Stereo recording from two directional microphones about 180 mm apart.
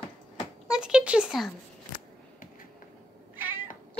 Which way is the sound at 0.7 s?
5° right (ahead or behind).